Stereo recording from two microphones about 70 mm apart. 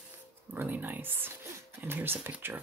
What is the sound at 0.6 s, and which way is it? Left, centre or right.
Speech, right.